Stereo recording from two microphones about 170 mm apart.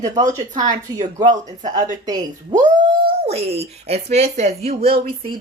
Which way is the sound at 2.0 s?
20° right (ahead or behind).